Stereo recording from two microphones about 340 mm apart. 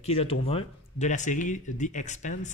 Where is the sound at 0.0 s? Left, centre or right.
Centre.